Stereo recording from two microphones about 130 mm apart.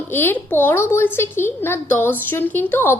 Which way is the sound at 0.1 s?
15° left (ahead or behind).